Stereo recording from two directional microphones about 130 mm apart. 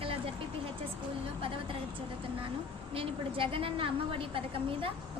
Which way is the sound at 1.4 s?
45° right (ahead or behind).